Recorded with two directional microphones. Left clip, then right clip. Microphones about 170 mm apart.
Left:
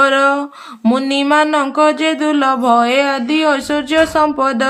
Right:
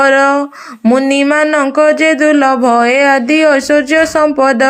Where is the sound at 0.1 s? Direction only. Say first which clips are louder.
Right 4 dB; 25° right (ahead or behind).